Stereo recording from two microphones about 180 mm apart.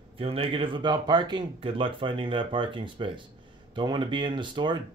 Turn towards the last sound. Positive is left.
turn(degrees=-25)  # may be behind; listen again after turning